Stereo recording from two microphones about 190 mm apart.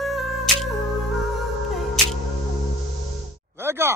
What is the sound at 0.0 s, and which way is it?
Music, centre (ahead or behind).